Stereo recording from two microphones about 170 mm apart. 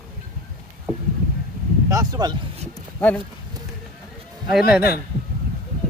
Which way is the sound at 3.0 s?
10° left (ahead or behind).